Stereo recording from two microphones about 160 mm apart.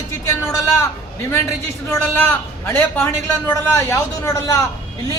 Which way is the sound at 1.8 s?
15° left (ahead or behind).